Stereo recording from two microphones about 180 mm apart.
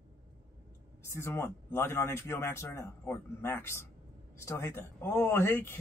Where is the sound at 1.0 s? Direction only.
15° left (ahead or behind).